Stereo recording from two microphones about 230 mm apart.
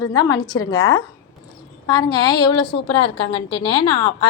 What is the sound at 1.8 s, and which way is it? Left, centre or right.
A woman's voice, centre.